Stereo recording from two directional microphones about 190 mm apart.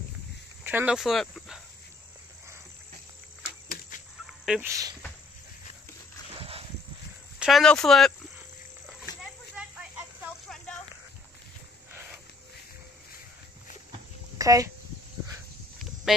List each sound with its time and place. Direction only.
0.7 s speech: 5° right (ahead or behind)
3.6 s fowl: 50° left (ahead or behind)
4.5 s speech: 10° right (ahead or behind)
7.3 s speech: centre (ahead or behind)
9.2 s a sound: 5° right (ahead or behind)
14.4 s speech: 20° right (ahead or behind)
16.1 s speech: centre (ahead or behind)